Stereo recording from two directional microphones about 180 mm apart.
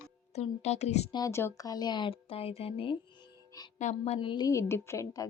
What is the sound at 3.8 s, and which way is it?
Speech, 40° left (ahead or behind).